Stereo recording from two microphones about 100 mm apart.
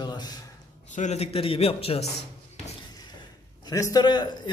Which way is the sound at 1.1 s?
80° left.